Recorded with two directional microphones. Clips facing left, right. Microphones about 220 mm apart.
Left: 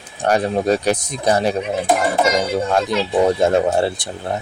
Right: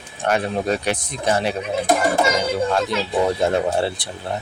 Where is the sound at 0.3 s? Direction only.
40° left (ahead or behind).